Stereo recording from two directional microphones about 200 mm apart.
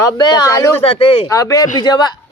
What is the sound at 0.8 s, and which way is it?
Speech, 25° left (ahead or behind).